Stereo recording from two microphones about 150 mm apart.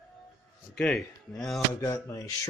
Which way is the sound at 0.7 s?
5° left (ahead or behind).